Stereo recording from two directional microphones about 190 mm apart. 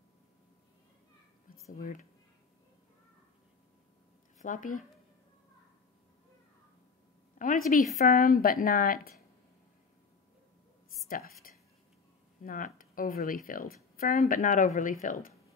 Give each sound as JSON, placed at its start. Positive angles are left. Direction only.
{"t": 1.7, "sound": "a woman's voice", "side_deg": 45}
{"t": 4.4, "sound": "speech", "side_deg": 45}
{"t": 7.3, "sound": "a woman's voice", "side_deg": 45}
{"t": 11.1, "sound": "speech", "side_deg": 50}
{"t": 12.4, "sound": "a woman's voice", "side_deg": 45}